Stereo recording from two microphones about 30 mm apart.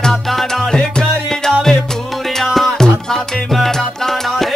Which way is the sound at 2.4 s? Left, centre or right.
Centre.